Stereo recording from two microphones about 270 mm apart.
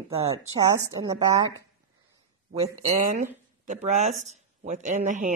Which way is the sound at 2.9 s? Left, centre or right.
Right.